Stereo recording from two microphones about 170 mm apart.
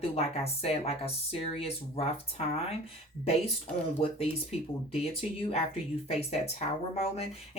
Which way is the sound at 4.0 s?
35° left (ahead or behind).